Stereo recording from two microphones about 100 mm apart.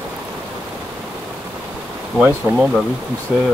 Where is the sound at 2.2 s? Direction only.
20° right (ahead or behind).